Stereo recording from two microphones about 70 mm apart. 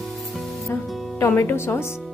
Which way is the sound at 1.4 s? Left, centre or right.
Left.